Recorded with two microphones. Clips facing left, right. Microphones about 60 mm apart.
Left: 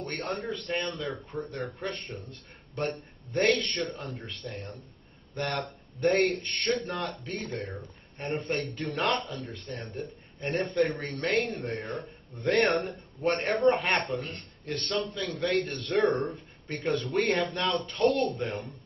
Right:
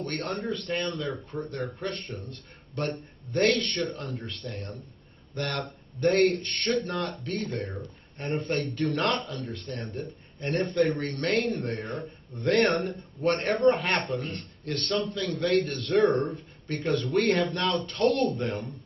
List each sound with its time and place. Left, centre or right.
0.0 s speech: centre